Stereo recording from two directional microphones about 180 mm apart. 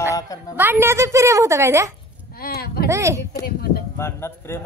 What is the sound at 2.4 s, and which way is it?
Speech, 60° left (ahead or behind).